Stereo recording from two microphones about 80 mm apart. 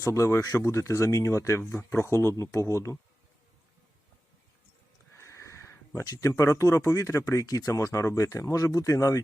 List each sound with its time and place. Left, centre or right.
0.0 s speech: left
5.1 s speech: left